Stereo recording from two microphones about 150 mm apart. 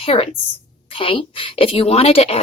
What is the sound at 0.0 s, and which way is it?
A woman's voice, 40° left (ahead or behind).